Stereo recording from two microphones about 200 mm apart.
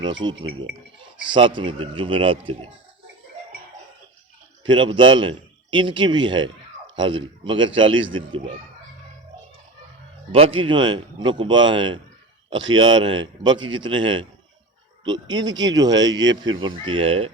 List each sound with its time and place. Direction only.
0.4 s a man's voice: 25° right (ahead or behind)
4.6 s a man's voice: 25° right (ahead or behind)
10.3 s a man's voice: 30° right (ahead or behind)